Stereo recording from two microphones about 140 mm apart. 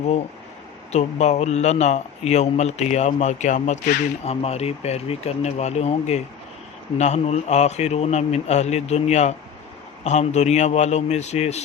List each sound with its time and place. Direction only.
0.9 s speech: 50° left (ahead or behind)